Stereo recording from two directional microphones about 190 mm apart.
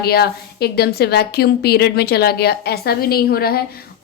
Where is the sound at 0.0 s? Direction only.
55° left (ahead or behind).